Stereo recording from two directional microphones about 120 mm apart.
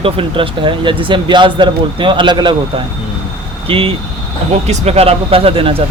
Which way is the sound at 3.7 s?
50° right (ahead or behind).